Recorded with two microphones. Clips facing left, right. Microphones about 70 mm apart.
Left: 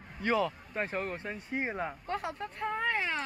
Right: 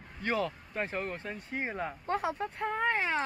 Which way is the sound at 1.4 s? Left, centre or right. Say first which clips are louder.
Left 1 dB; centre.